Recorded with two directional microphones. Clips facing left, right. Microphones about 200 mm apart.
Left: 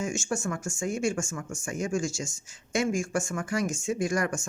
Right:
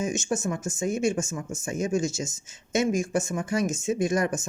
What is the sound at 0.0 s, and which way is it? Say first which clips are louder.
Speech: right 3 dB; 20° right (ahead or behind).